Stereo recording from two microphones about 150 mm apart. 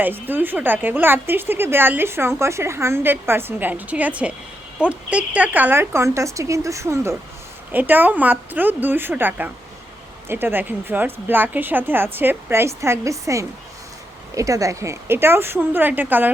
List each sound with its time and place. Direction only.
0.0 s a woman's voice: 15° right (ahead or behind)